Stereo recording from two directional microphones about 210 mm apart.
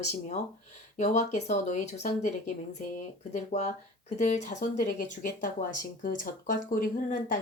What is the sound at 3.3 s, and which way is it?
Speech, 35° left (ahead or behind).